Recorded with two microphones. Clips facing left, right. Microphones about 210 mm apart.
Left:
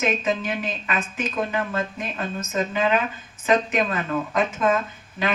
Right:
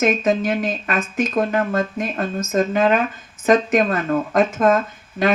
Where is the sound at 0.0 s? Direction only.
45° right (ahead or behind).